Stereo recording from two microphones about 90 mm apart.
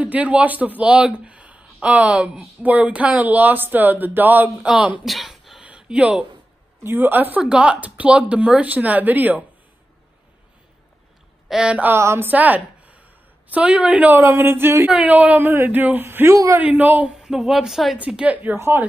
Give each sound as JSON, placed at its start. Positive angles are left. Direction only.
{"t": 0.0, "sound": "a man's voice", "side_deg": -15}
{"t": 5.0, "sound": "a sound", "side_deg": 0}
{"t": 5.7, "sound": "speech", "side_deg": -10}
{"t": 6.8, "sound": "a man's voice", "side_deg": -25}
{"t": 11.4, "sound": "a man's voice", "side_deg": -10}
{"t": 12.0, "sound": "a woman's voice", "side_deg": -30}
{"t": 12.3, "sound": "a woman's voice", "side_deg": -20}
{"t": 14.9, "sound": "speech", "side_deg": -15}
{"t": 17.2, "sound": "a woman's voice", "side_deg": -5}
{"t": 17.9, "sound": "a man's voice", "side_deg": -15}
{"t": 18.6, "sound": "speech", "side_deg": -30}